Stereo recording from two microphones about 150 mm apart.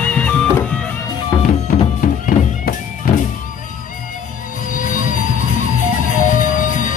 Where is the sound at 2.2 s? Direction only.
65° left (ahead or behind).